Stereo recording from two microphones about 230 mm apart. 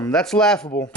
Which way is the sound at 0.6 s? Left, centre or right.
Centre.